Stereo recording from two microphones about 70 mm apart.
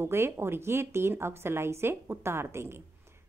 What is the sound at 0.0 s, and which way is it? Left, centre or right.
Speech, right.